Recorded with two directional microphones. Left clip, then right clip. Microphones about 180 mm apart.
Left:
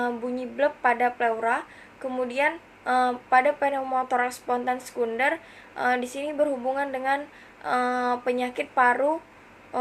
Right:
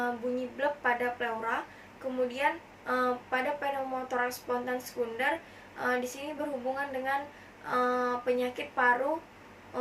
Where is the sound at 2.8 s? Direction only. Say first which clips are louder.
Left 7 dB; 25° left (ahead or behind).